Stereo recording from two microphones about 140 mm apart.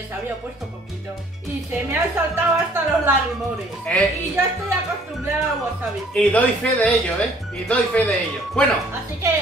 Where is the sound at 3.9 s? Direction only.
10° left (ahead or behind).